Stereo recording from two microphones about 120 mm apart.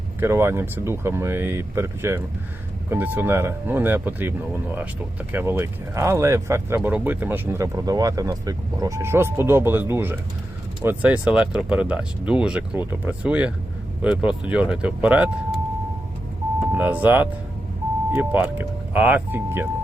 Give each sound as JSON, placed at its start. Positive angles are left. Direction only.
{"t": 0.2, "sound": "speech", "side_deg": -20}
{"t": 7.9, "sound": "speech", "side_deg": -30}
{"t": 16.7, "sound": "speech", "side_deg": -15}